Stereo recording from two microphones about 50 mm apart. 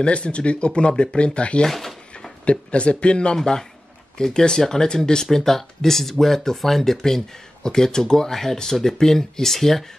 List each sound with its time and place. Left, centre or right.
0.0 s speech: left
1.7 s speech: centre
2.4 s speech: left; by 9.8 s centre